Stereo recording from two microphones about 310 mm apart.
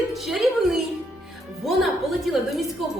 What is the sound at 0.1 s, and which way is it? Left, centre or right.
A woman's voice, centre.